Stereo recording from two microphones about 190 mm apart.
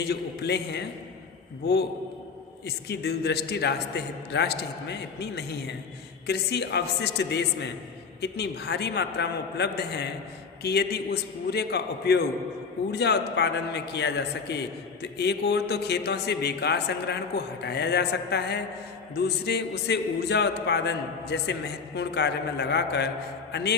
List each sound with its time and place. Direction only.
0.0 s speech: 60° left (ahead or behind)
2.6 s a man's voice: 60° left (ahead or behind)